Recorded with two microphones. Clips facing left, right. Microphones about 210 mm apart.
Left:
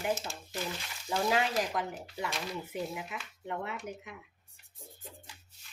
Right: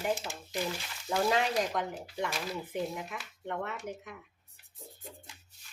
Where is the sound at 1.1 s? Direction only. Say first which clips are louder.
Right 1 dB; centre (ahead or behind).